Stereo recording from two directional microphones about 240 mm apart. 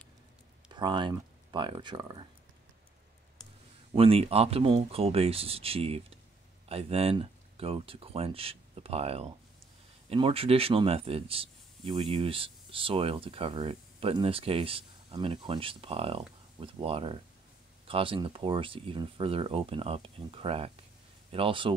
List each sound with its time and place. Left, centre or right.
0.7 s speech: centre
3.9 s speech: right